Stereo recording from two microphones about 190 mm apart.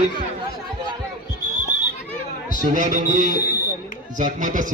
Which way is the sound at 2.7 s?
40° right (ahead or behind).